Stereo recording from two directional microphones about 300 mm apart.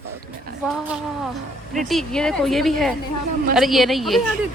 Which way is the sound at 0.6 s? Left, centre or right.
Centre.